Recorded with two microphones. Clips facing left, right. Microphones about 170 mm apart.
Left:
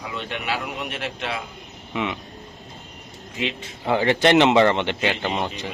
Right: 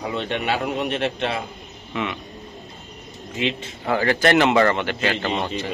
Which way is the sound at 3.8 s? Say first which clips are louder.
Left 1 dB; 20° left (ahead or behind).